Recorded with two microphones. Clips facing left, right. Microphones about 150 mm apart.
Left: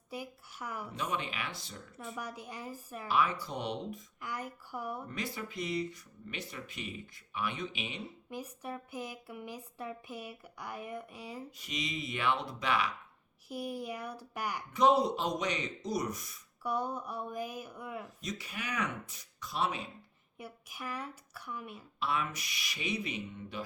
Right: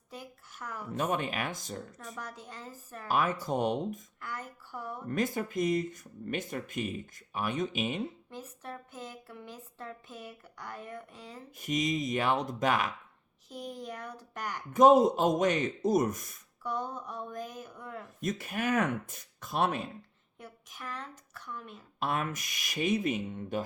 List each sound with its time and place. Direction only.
0.1 s a sound: 10° left (ahead or behind)
0.9 s speech: 50° right (ahead or behind)
2.1 s speech: 10° left (ahead or behind)
3.1 s speech: 45° right (ahead or behind)
4.2 s speech: 15° left (ahead or behind)
5.0 s speech: 45° right (ahead or behind)
8.3 s speech: 10° left (ahead or behind)
11.5 s speech: 50° right (ahead or behind)
13.5 s speech: 10° left (ahead or behind)
14.7 s speech: 45° right (ahead or behind)
16.6 s speech: 10° left (ahead or behind)
18.2 s speech: 50° right (ahead or behind)
20.4 s speech: 10° left (ahead or behind)
22.0 s speech: 50° right (ahead or behind)